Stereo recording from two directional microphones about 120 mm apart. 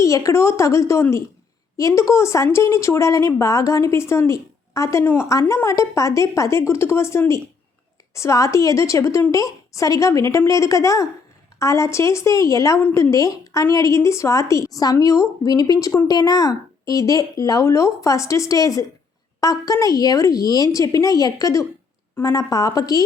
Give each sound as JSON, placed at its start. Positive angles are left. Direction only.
{"t": 0.0, "sound": "speech", "side_deg": 25}